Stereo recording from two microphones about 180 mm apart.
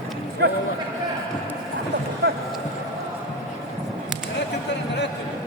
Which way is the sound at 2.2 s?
70° right (ahead or behind).